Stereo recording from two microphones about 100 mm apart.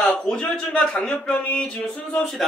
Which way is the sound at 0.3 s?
10° left (ahead or behind).